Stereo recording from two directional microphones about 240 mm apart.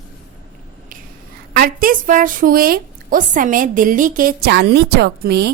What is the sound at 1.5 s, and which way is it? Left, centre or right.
A woman's voice, right.